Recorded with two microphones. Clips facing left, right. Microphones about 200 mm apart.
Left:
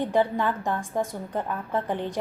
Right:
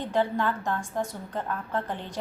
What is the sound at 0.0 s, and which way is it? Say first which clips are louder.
A woman's voice: left 3 dB; 15° left (ahead or behind).